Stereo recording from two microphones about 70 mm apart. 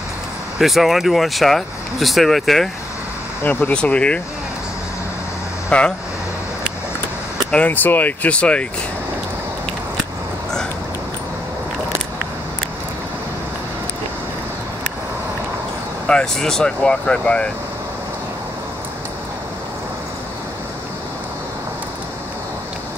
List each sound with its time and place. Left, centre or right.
0.6 s speech: centre
3.4 s speech: left
5.7 s speech: centre
7.5 s speech: left
16.1 s speech: centre